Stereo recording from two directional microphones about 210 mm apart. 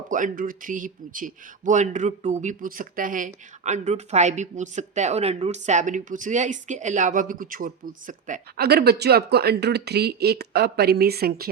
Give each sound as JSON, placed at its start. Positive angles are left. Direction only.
{"t": 0.1, "sound": "speech", "side_deg": -40}